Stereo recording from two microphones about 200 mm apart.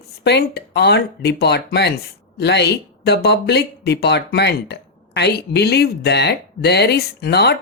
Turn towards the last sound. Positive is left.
turn(degrees=55)  # may be behind; listen again after turning